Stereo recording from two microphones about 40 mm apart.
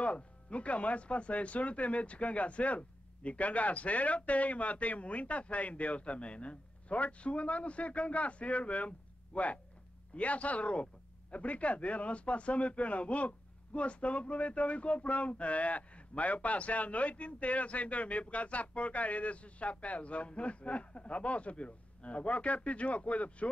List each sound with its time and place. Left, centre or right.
0.0 s speech: left